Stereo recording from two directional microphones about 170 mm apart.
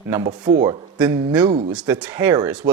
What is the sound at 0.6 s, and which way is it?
Speech, 30° right (ahead or behind).